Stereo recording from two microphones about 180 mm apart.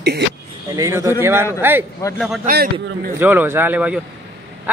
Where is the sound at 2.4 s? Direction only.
55° right (ahead or behind).